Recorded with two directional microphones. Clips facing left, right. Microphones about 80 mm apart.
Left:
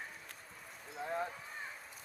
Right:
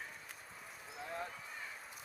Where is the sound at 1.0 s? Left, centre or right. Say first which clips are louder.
Left 6 dB; left.